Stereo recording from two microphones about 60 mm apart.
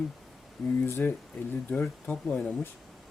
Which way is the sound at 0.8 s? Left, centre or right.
Left.